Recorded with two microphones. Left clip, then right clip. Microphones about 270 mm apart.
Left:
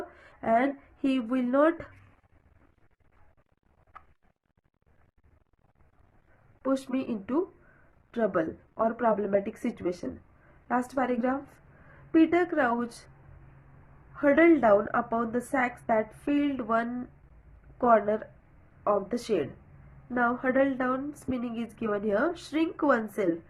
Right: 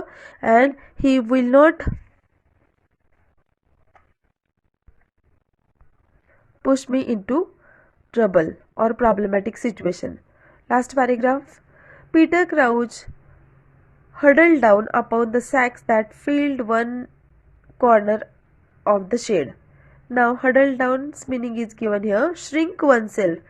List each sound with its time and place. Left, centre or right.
0.2 s a woman's voice: right
6.6 s a woman's voice: right
14.1 s a woman's voice: right